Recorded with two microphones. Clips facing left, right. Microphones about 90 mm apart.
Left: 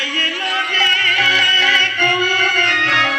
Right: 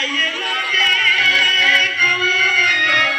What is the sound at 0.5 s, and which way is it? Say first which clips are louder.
Music: left 2 dB; 90° left.